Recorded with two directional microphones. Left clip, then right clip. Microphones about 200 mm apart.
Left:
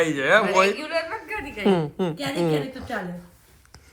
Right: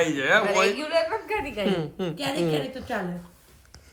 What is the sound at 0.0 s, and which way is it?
Speech, 5° right (ahead or behind).